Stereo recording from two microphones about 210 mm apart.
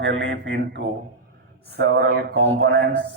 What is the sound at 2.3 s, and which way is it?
Mantra, 65° right (ahead or behind).